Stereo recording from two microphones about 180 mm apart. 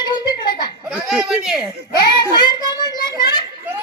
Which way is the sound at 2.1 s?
25° left (ahead or behind).